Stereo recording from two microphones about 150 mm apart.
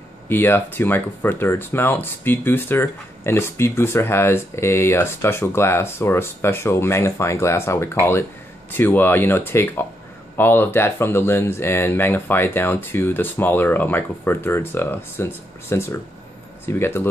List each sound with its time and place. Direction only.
0.3 s speech: 15° left (ahead or behind)